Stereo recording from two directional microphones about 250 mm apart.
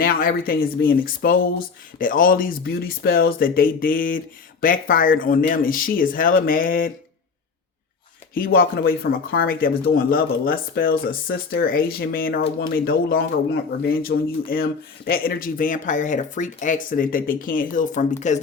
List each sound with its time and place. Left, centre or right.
0.0 s speech: left
8.4 s speech: left